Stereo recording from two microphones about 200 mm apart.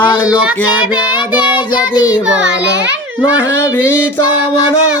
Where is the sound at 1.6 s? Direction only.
20° left (ahead or behind).